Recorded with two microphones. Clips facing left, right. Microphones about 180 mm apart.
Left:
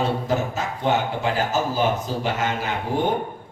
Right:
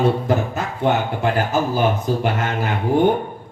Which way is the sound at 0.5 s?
55° right (ahead or behind).